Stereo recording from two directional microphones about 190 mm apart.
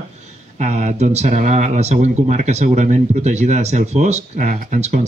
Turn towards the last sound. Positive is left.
turn(degrees=-35)  # may be behind; listen again after turning